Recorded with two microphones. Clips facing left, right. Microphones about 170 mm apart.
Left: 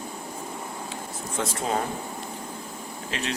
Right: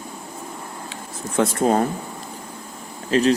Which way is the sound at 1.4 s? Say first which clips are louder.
Right 9 dB; 50° right (ahead or behind).